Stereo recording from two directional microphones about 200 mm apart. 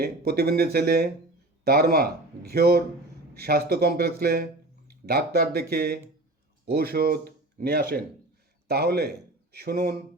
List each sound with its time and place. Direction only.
0.0 s speech: 50° right (ahead or behind)